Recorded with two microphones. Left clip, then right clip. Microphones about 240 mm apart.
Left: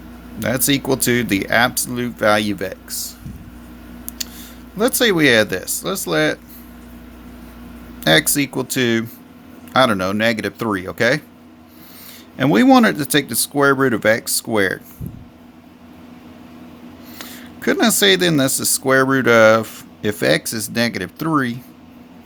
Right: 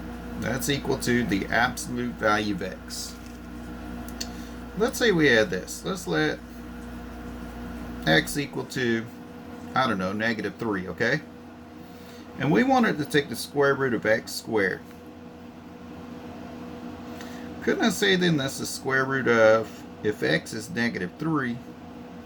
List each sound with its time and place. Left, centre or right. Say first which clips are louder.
0.3 s speech: left 9 dB; left
4.8 s speech: left 7 dB; left
8.0 s speech: left 8 dB; left
12.4 s speech: left 9 dB; left
17.7 s speech: left 8 dB; left